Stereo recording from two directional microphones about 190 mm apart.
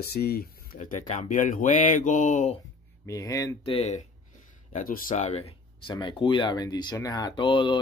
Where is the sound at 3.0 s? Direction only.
15° left (ahead or behind); by 4.0 s 35° left (ahead or behind).